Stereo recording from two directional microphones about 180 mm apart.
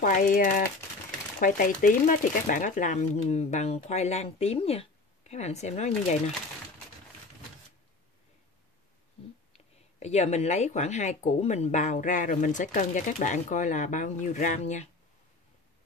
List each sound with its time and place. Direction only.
0.0 s speech: 50° left (ahead or behind)
9.9 s speech: 40° left (ahead or behind)